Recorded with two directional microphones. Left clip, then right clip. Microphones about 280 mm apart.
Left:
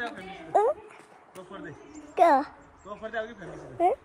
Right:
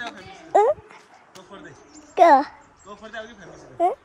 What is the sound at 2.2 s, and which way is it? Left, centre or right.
Speech, centre.